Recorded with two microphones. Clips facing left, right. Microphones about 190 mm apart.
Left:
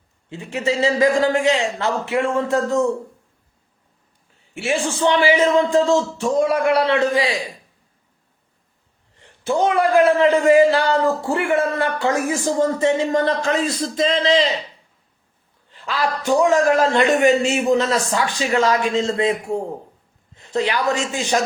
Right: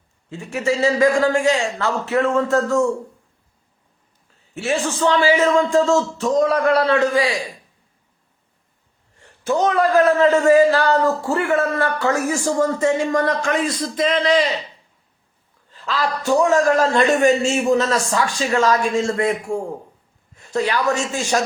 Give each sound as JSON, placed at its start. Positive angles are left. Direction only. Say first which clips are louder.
{"t": 0.3, "sound": "a man's voice", "louder": "right 1 dB", "side_deg": 20}
{"t": 4.5, "sound": "a man's voice", "louder": "even", "side_deg": 10}
{"t": 9.6, "sound": "a man's voice", "louder": "left 1 dB", "side_deg": 10}
{"t": 15.7, "sound": "a man's voice", "louder": "even", "side_deg": 15}
{"t": 16.8, "sound": "a man's voice", "louder": "even", "side_deg": 35}
{"t": 17.2, "sound": "a woman's voice", "louder": "even", "side_deg": 20}